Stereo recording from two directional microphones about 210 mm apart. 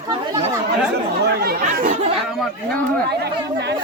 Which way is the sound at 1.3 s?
50° right (ahead or behind).